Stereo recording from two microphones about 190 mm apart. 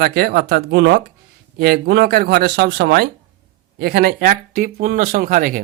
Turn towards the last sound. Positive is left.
turn(degrees=-45)  # may be behind; listen again after turning